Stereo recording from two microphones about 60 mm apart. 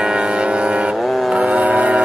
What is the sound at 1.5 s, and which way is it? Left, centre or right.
Train, right.